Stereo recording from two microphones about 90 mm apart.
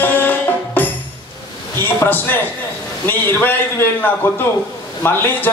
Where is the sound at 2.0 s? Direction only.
20° left (ahead or behind).